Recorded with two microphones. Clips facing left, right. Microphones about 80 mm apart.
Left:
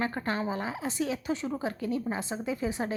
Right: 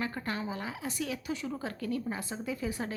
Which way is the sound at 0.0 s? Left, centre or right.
Left.